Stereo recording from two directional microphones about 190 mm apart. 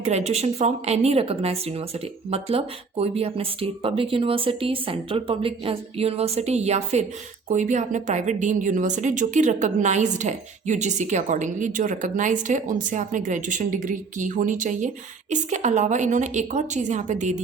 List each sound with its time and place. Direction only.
0.0 s a woman's voice: 35° right (ahead or behind)